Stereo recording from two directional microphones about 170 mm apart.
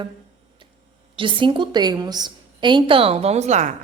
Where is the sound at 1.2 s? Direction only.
30° right (ahead or behind).